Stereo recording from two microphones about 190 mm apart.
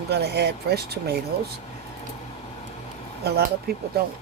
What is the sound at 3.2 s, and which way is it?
Speech, 60° right (ahead or behind).